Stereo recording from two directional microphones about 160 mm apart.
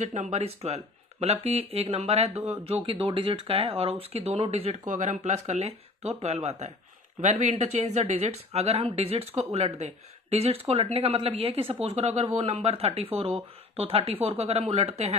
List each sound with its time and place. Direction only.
0.0 s speech: 45° right (ahead or behind)